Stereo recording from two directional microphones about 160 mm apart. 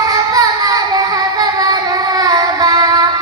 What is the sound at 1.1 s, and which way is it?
Child singing, 25° right (ahead or behind).